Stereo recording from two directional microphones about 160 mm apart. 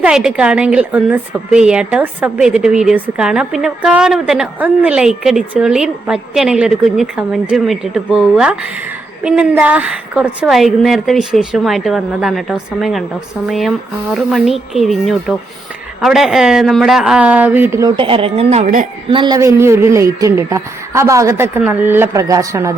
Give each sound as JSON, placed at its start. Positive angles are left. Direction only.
{"t": 0.0, "sound": "a woman's voice", "side_deg": -5}
{"t": 19.0, "sound": "a woman's voice", "side_deg": -30}